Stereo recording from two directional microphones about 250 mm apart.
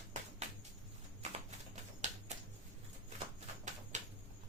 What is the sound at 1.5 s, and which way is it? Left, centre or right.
Typewriter, right.